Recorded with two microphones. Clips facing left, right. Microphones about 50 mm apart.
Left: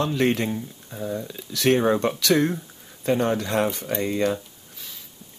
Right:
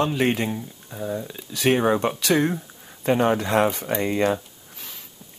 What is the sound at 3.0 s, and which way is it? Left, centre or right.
Speech, right.